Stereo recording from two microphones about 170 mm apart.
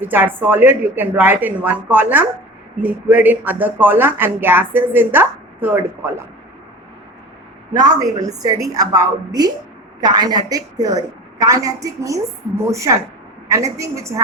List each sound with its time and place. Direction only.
0.0 s speech: 10° right (ahead or behind)
7.7 s a woman's voice: 20° right (ahead or behind)